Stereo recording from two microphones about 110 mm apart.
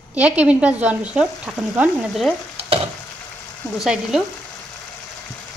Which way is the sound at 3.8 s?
5° right (ahead or behind).